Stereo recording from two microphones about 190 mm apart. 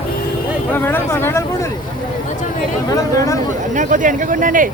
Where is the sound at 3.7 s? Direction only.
40° right (ahead or behind).